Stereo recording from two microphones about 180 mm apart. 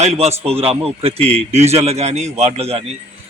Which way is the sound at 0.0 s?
35° right (ahead or behind).